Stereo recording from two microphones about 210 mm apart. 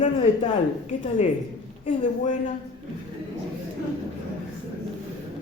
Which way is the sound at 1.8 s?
35° left (ahead or behind).